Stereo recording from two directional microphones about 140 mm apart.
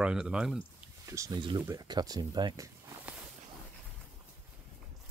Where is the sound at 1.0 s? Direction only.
20° right (ahead or behind).